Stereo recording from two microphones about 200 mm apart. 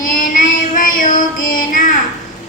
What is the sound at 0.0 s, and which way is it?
Music, 40° left (ahead or behind).